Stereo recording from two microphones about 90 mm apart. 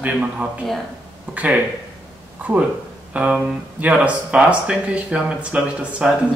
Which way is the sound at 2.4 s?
15° right (ahead or behind).